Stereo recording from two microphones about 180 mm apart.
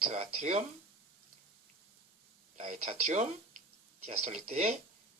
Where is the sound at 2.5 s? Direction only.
40° right (ahead or behind).